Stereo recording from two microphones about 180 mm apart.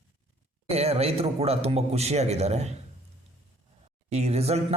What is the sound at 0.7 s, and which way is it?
Speech, 35° right (ahead or behind).